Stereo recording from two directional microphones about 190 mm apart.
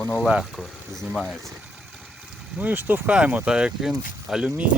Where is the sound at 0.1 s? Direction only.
5° right (ahead or behind).